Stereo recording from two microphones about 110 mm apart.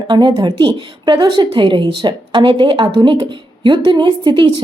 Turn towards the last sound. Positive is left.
turn(degrees=-45)  # may be behind; listen again after turning